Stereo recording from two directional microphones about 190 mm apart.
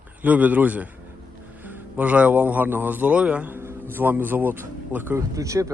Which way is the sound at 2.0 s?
5° right (ahead or behind).